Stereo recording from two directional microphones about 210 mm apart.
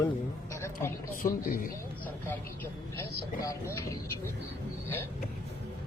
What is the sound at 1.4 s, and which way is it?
Speech, 45° left (ahead or behind).